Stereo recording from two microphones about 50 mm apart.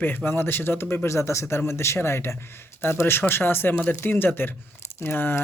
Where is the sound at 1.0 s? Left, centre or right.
Left.